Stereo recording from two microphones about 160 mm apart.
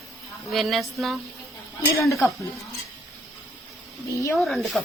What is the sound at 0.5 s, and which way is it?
Speech, centre (ahead or behind).